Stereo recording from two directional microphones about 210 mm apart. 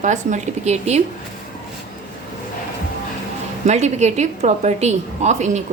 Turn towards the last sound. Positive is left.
turn(degrees=-35)  # may be behind; listen again after turning